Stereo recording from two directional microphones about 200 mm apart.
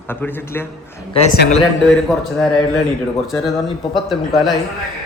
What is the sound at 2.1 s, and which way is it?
Speech, centre (ahead or behind).